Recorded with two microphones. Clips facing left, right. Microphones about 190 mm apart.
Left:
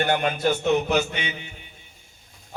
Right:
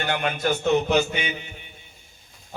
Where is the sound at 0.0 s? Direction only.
40° left (ahead or behind).